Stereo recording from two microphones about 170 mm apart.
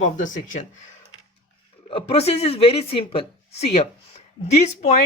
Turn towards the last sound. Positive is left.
turn(degrees=45)  # may be behind; listen again after turning